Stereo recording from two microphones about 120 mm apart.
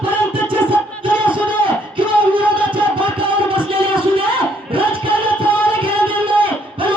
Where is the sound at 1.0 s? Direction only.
45° right (ahead or behind).